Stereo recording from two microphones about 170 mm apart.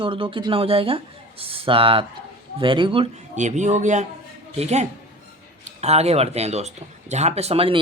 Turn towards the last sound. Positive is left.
turn(degrees=-35)  # may be behind; listen again after turning